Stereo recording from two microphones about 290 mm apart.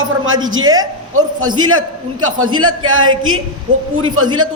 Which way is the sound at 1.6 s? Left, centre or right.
Right.